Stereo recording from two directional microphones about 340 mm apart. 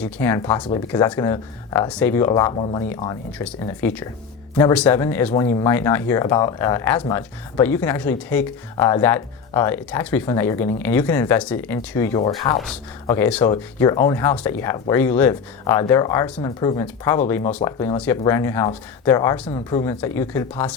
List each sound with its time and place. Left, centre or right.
0.0 s speech: centre